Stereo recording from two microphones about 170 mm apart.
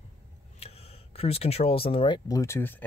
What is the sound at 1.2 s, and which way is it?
Speech, 35° left (ahead or behind).